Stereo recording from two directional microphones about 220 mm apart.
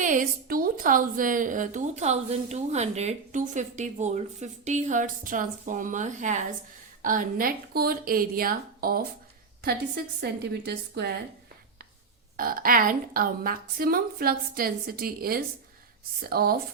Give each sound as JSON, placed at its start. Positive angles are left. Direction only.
{"t": 0.0, "sound": "a woman's voice", "side_deg": -35}
{"t": 12.4, "sound": "a woman's voice", "side_deg": -40}